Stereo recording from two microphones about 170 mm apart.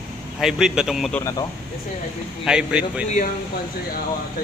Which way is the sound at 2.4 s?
5° right (ahead or behind).